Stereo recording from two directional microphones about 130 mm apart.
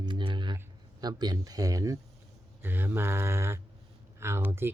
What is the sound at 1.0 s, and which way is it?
Speech, 30° right (ahead or behind).